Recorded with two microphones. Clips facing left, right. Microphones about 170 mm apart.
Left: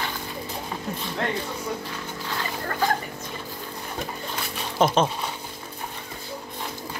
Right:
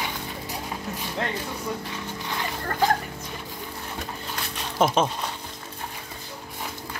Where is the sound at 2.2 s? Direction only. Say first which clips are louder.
Left 1 dB; 20° right (ahead or behind).